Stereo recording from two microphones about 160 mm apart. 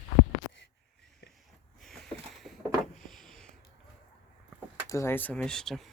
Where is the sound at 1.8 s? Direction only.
5° left (ahead or behind).